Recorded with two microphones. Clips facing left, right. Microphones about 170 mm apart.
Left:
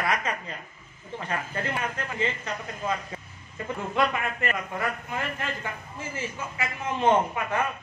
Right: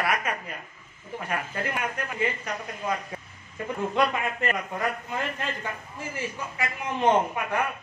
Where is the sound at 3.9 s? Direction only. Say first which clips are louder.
Even; 15° right (ahead or behind).